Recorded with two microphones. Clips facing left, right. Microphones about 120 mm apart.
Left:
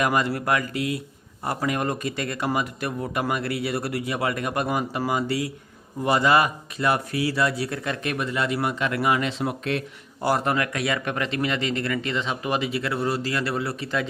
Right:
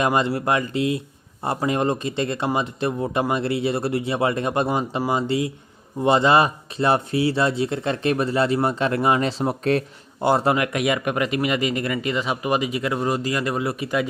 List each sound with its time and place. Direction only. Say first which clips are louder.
0.0 s speech: right 3 dB; 25° right (ahead or behind)
10.2 s speech: right 4 dB; 25° right (ahead or behind)